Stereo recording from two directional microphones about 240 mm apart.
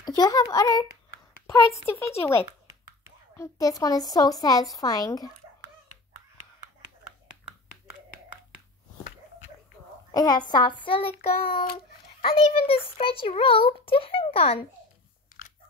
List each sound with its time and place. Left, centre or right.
0.0 s a woman's voice: centre
10.1 s a woman's voice: centre
11.6 s babbling: left
12.4 s a child's voice: left